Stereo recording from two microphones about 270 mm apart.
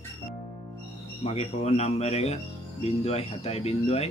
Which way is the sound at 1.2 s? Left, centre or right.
Left.